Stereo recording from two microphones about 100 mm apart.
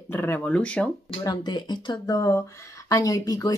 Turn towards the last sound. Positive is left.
turn(degrees=35)  # may be behind; listen again after turning